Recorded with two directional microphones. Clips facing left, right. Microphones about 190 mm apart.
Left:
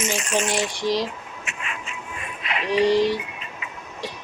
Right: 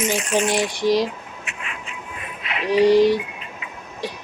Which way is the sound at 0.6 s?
10° right (ahead or behind).